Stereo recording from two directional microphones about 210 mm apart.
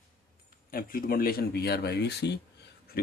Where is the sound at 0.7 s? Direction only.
45° left (ahead or behind).